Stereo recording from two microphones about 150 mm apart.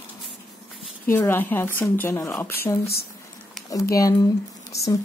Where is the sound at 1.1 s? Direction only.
15° left (ahead or behind).